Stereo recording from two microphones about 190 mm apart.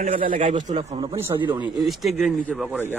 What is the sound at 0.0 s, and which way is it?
Speech, 40° right (ahead or behind).